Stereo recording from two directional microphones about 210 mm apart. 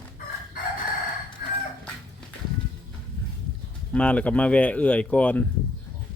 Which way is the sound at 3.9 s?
5° left (ahead or behind).